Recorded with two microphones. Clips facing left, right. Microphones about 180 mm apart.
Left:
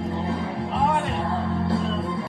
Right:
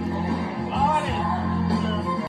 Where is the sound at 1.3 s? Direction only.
25° left (ahead or behind).